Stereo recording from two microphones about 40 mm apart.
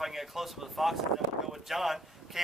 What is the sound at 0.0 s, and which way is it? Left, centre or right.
Speech, centre.